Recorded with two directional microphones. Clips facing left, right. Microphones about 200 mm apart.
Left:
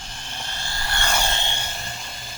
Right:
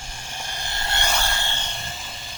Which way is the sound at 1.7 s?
Centre (ahead or behind).